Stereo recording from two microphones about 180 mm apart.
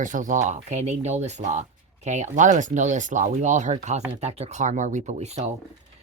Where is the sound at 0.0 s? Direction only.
45° right (ahead or behind).